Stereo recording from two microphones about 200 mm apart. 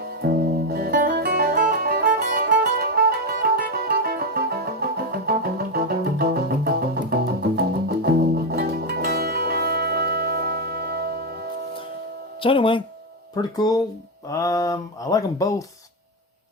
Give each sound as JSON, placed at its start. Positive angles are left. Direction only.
{"t": 0.7, "sound": "music", "side_deg": -50}
{"t": 12.4, "sound": "speech", "side_deg": 25}